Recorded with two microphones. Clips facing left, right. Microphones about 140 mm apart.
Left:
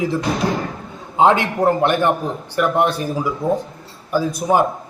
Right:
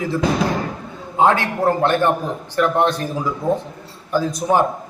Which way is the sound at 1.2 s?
20° left (ahead or behind).